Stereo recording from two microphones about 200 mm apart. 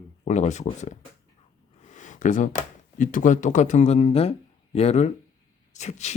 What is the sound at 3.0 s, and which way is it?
Speech, 40° left (ahead or behind).